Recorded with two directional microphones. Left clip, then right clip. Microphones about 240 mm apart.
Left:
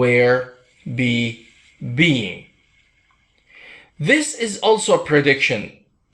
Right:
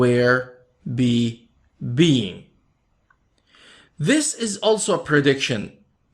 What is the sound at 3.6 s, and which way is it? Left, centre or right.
Speech, right.